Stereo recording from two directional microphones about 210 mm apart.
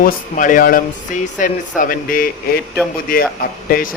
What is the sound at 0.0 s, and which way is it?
Speech, 40° left (ahead or behind).